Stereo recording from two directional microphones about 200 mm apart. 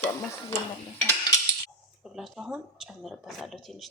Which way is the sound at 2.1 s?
Centre (ahead or behind).